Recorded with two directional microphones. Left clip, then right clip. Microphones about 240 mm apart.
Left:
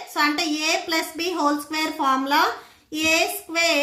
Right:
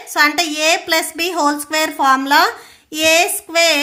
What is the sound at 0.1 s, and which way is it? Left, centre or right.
A woman's voice, right.